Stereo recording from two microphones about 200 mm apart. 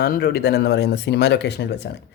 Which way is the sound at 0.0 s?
50° left (ahead or behind).